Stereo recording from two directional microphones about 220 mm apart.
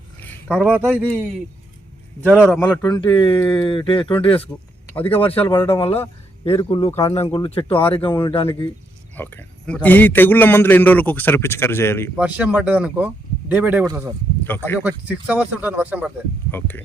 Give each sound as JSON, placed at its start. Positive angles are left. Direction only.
{"t": 0.2, "sound": "a sound", "side_deg": 5}
{"t": 0.9, "sound": "speech", "side_deg": 5}
{"t": 2.2, "sound": "speech", "side_deg": -5}
{"t": 2.6, "sound": "a man's voice", "side_deg": 10}
{"t": 9.1, "sound": "a man's voice", "side_deg": 10}
{"t": 12.1, "sound": "speech", "side_deg": -5}
{"t": 14.4, "sound": "a man's voice", "side_deg": 10}
{"t": 14.8, "sound": "speech", "side_deg": -5}
{"t": 16.5, "sound": "a man's voice", "side_deg": 10}